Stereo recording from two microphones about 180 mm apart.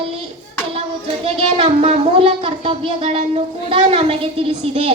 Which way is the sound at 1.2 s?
30° right (ahead or behind).